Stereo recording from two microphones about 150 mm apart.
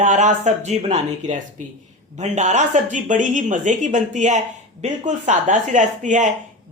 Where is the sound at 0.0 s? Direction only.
55° right (ahead or behind).